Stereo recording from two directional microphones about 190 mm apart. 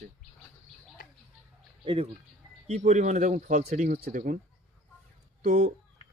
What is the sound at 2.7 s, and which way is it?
Speech, 40° right (ahead or behind).